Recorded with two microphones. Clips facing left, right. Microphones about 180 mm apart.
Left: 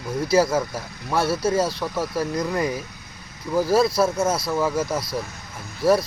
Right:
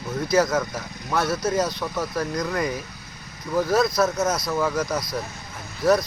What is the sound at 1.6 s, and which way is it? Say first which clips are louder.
Speech: left 2 dB; 5° left (ahead or behind).